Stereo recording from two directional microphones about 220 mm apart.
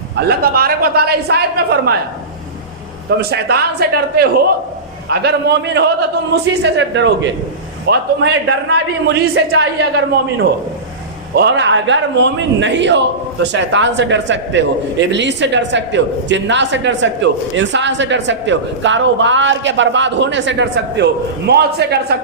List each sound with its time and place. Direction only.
0.2 s speech: 45° right (ahead or behind)
3.2 s speech: 45° right (ahead or behind)
11.3 s speech: 50° right (ahead or behind)